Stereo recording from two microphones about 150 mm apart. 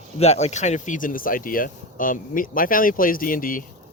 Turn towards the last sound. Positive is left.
turn(degrees=65)  # may be behind; listen again after turning